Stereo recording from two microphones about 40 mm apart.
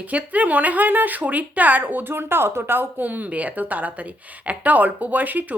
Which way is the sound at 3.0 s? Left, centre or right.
Right.